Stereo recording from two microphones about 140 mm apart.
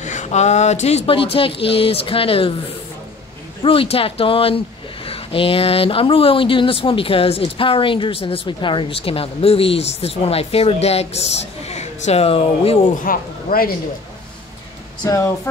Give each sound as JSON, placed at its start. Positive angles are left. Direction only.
{"t": 0.0, "sound": "speech", "side_deg": 60}
{"t": 3.6, "sound": "speech", "side_deg": 40}
{"t": 13.0, "sound": "speech", "side_deg": 90}
{"t": 15.0, "sound": "speech", "side_deg": 25}